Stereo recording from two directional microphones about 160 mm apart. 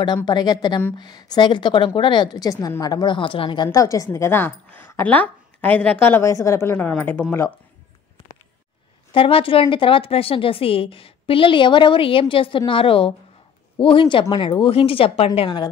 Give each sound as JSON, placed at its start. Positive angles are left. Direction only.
{"t": 0.0, "sound": "a woman's voice", "side_deg": 25}
{"t": 9.1, "sound": "a woman's voice", "side_deg": 35}